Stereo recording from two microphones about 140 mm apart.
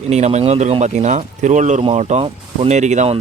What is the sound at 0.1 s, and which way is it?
A man's voice, 55° right (ahead or behind).